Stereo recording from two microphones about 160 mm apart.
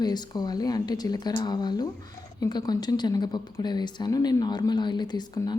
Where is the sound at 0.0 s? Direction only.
25° left (ahead or behind).